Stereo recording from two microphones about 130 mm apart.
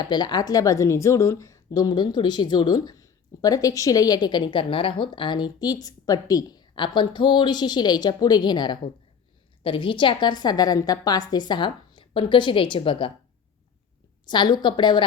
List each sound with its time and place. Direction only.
0.0 s speech: 35° left (ahead or behind)
14.3 s speech: 35° left (ahead or behind)